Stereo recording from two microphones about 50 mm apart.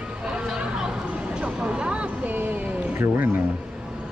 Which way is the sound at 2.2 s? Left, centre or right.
Right.